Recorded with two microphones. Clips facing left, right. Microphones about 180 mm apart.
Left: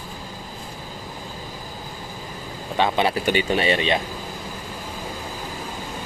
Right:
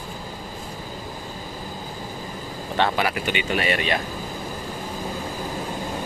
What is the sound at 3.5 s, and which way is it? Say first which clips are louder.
Speech: left 3 dB; 25° left (ahead or behind).